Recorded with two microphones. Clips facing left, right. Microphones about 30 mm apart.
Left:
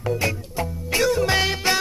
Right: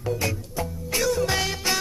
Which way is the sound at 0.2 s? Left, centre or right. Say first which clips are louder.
Left 3 dB; left.